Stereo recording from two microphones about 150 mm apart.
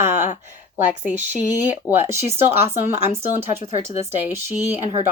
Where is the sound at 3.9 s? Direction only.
15° right (ahead or behind).